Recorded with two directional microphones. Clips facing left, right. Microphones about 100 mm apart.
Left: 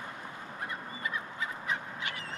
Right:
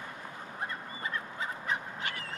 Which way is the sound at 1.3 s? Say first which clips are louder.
Right 1 dB; 40° right (ahead or behind).